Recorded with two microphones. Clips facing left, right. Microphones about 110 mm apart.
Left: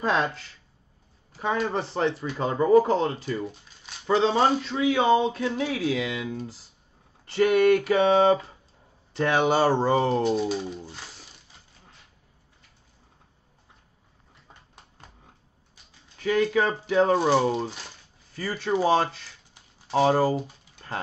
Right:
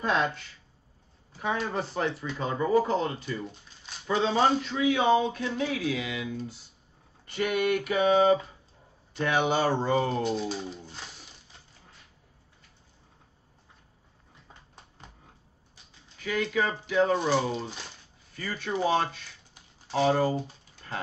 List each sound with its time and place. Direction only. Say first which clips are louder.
0.0 s speech: left 2 dB; 30° left (ahead or behind)
2.3 s speech: left 6 dB; 40° left (ahead or behind)
10.4 s speech: left 5 dB; 15° left (ahead or behind)
16.2 s speech: left 5 dB; 40° left (ahead or behind)